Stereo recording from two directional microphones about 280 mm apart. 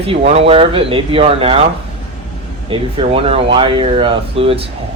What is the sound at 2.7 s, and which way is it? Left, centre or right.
Speech, centre.